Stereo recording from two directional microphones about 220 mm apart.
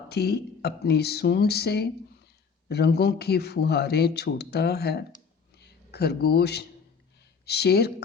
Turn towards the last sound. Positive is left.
turn(degrees=45)  # may be behind; listen again after turning